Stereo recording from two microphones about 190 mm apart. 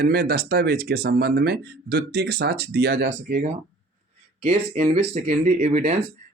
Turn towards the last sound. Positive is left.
turn(degrees=-35)  # may be behind; listen again after turning